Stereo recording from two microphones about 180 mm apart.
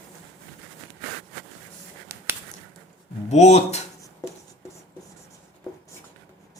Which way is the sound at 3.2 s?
40° left (ahead or behind).